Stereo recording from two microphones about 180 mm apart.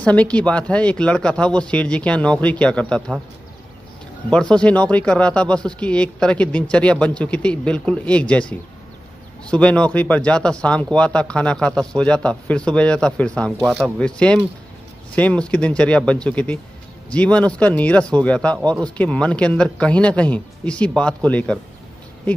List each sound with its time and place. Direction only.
0.0 s speech: 5° left (ahead or behind)
4.3 s speech: 5° left (ahead or behind)